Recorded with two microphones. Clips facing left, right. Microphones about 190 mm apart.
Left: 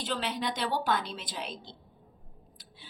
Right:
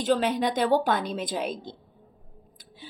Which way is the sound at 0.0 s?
50° right (ahead or behind).